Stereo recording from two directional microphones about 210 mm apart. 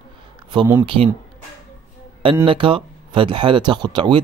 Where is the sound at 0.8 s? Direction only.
25° right (ahead or behind).